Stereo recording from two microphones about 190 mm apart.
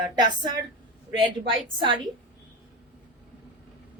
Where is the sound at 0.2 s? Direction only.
25° right (ahead or behind).